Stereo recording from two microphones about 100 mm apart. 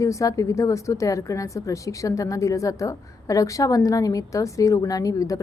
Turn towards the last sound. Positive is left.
turn(degrees=35)  # may be behind; listen again after turning